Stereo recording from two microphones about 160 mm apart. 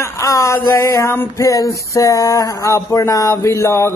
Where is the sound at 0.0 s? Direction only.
20° left (ahead or behind).